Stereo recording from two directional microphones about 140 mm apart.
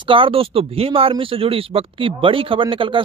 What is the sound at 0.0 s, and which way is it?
A man's voice, 40° right (ahead or behind).